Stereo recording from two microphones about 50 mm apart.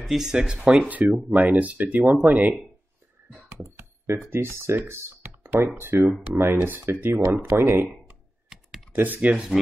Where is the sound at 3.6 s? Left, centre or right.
Right.